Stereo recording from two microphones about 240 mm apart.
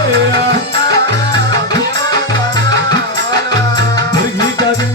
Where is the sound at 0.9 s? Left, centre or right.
Right.